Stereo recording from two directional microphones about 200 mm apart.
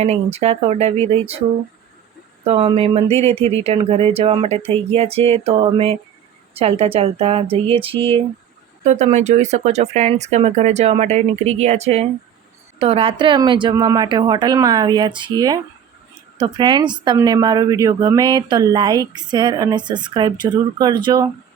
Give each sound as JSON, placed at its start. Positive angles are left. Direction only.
{"t": 0.0, "sound": "speech", "side_deg": -30}
{"t": 2.4, "sound": "speech", "side_deg": -30}